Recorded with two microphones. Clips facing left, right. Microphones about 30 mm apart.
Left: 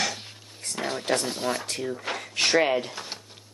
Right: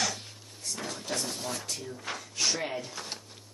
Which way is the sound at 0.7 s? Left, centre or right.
Left.